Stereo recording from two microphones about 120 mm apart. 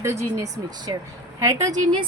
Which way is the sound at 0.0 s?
25° right (ahead or behind).